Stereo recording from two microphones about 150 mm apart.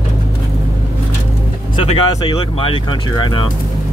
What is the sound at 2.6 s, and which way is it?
Speech, 35° left (ahead or behind).